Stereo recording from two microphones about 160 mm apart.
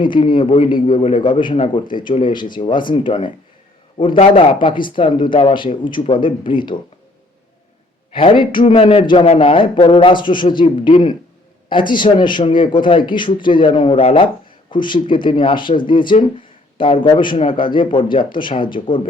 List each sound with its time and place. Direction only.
0.0 s a man's voice: 30° left (ahead or behind)
8.1 s a man's voice: 35° left (ahead or behind)